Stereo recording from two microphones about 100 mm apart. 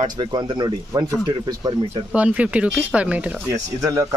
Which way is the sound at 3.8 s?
35° right (ahead or behind).